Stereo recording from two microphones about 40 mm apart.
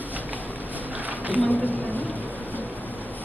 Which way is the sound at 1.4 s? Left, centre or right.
Left.